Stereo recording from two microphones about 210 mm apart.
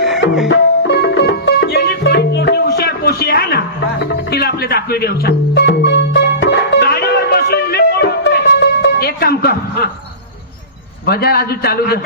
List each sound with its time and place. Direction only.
0.4 s music: 55° left (ahead or behind)
11.0 s a man's voice: 50° left (ahead or behind)